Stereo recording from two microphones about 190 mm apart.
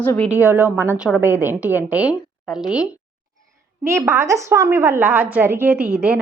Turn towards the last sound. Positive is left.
turn(degrees=-5)  # may be behind; listen again after turning